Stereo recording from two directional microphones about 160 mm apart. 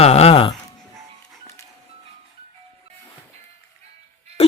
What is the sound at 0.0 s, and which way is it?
Music, 40° left (ahead or behind).